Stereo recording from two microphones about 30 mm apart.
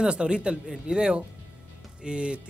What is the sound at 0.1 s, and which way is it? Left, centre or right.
Speech, right.